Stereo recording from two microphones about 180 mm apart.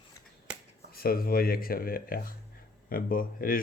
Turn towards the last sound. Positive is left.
turn(degrees=50)  # may be behind; listen again after turning